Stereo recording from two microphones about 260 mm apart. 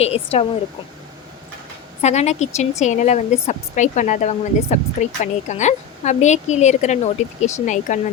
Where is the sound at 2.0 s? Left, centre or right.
Left.